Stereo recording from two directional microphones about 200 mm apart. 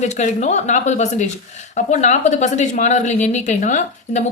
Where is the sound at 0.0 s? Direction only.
35° left (ahead or behind).